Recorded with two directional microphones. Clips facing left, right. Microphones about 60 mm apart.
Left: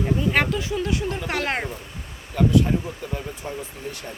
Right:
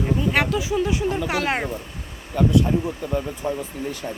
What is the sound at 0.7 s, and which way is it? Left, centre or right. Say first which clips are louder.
Speech: right 3 dB; centre.